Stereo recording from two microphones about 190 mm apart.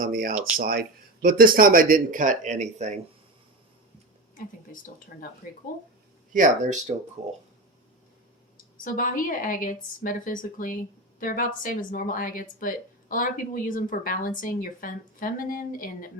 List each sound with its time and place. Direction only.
0.0 s speech: 45° right (ahead or behind)
4.4 s speech: 50° left (ahead or behind)
6.3 s speech: 40° right (ahead or behind)
8.8 s speech: 45° left (ahead or behind)